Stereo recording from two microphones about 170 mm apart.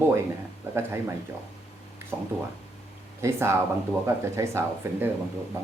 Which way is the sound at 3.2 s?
15° right (ahead or behind).